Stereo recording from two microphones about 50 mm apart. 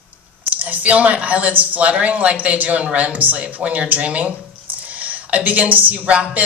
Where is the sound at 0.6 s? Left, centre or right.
Right.